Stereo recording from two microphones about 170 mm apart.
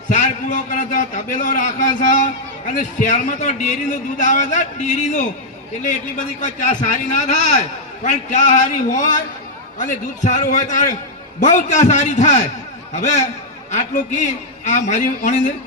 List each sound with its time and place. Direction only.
0.1 s a man's voice: 45° left (ahead or behind)
6.4 s a man's voice: 45° left (ahead or behind)
13.7 s a man's voice: 45° left (ahead or behind)